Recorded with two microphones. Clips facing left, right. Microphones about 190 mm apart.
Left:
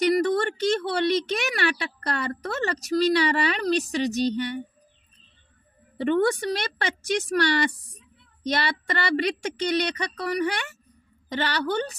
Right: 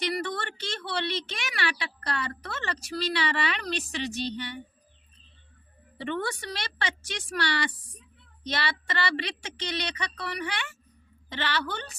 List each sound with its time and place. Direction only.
0.0 s speech: 40° left (ahead or behind)
6.0 s speech: 50° left (ahead or behind)